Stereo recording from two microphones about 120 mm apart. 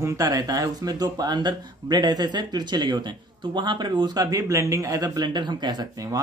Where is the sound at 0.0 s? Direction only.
30° right (ahead or behind).